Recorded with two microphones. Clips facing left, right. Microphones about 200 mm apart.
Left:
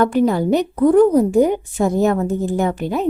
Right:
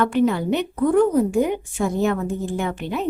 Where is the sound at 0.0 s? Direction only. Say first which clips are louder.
Left 3 dB; 40° left (ahead or behind).